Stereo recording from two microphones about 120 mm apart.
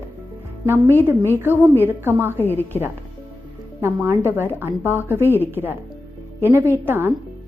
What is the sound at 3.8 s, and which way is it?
A woman's voice, 20° right (ahead or behind).